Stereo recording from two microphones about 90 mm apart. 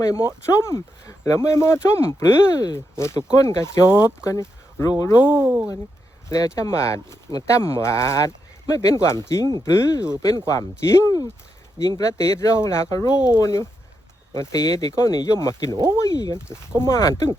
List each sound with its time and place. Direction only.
0.0 s speech: 35° left (ahead or behind)
5.3 s speech: 20° right (ahead or behind)
6.2 s speech: 35° left (ahead or behind)
15.7 s speech: 50° right (ahead or behind)
16.0 s speech: 40° left (ahead or behind)